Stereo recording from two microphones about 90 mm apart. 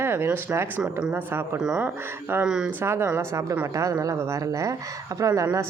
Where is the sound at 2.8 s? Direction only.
30° right (ahead or behind).